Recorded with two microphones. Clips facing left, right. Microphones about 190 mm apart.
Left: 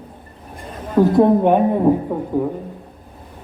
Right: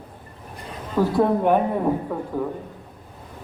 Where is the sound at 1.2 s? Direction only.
20° left (ahead or behind).